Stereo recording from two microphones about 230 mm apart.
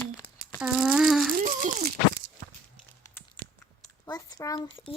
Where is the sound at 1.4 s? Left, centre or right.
Right.